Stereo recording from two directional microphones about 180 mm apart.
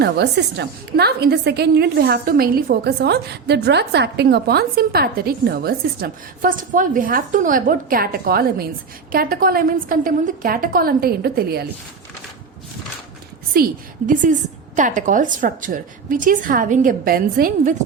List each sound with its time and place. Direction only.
0.0 s a woman's voice: 70° right (ahead or behind)
13.5 s a woman's voice: 55° right (ahead or behind)